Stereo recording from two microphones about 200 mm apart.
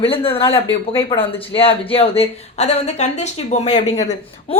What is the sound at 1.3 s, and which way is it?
Speech, 25° left (ahead or behind).